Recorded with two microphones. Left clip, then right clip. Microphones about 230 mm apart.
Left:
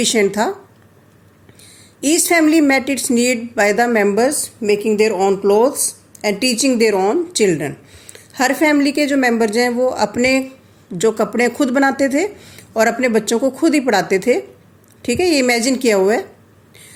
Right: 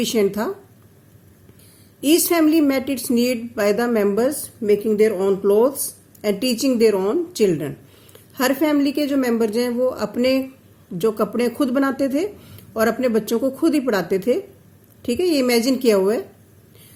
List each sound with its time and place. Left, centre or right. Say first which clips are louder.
0.0 s speech: left 5 dB; centre
2.0 s speech: left 3 dB; centre